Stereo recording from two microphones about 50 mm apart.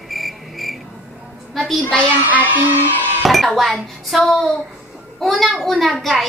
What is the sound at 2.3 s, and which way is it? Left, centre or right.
Child singing, right.